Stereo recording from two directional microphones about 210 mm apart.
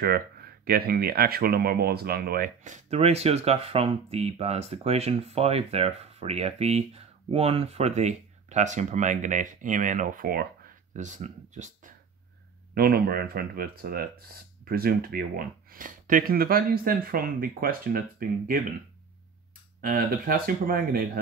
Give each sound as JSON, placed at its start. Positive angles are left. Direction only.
{"t": 0.0, "sound": "speech", "side_deg": -45}
{"t": 12.7, "sound": "speech", "side_deg": -45}
{"t": 19.8, "sound": "speech", "side_deg": -40}